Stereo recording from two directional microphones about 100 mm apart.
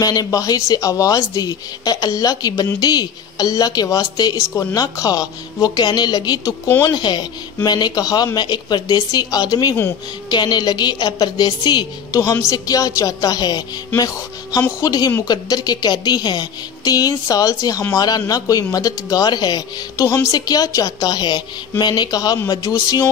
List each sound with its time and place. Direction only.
0.0 s a woman's voice: 40° left (ahead or behind)